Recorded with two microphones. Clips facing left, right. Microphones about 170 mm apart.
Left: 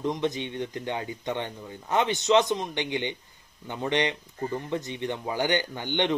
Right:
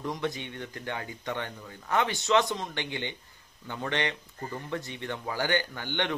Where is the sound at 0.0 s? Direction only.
20° left (ahead or behind).